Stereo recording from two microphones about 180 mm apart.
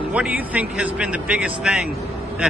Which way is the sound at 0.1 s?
10° right (ahead or behind).